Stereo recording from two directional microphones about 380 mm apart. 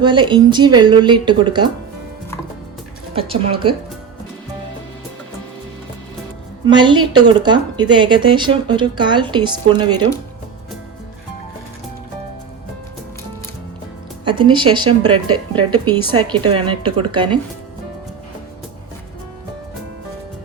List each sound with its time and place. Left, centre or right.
0.0 s speech: centre
3.2 s speech: centre
6.7 s speech: centre
14.3 s speech: centre
14.8 s speech: right
16.0 s speech: centre